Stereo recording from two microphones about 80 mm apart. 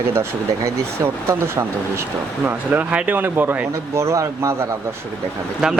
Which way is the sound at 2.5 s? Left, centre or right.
Right.